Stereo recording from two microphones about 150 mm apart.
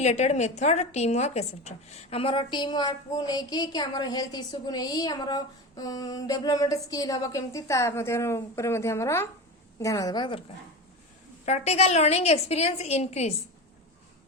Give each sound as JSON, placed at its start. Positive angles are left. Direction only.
{"t": 0.0, "sound": "a woman's voice", "side_deg": 50}
{"t": 11.4, "sound": "a woman's voice", "side_deg": 45}